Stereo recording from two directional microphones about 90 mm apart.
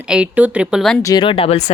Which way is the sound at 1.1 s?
80° left.